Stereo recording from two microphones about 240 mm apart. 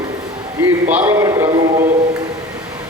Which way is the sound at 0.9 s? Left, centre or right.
Centre.